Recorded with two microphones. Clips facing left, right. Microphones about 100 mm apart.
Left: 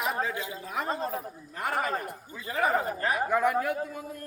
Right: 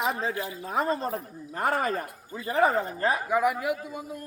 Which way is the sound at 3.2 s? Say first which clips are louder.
Left 3 dB; 5° right (ahead or behind).